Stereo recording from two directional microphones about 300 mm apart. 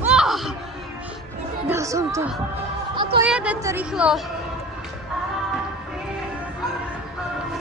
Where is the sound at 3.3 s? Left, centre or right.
Centre.